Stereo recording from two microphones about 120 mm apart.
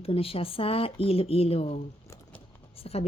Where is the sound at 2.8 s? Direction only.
60° left (ahead or behind).